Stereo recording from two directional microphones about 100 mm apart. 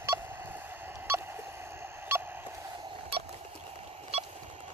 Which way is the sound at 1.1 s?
25° right (ahead or behind).